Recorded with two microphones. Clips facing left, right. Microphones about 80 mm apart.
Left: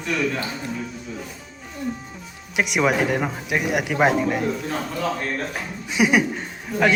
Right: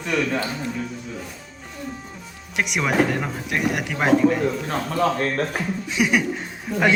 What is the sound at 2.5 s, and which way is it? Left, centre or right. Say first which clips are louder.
Speech: left 2 dB; centre.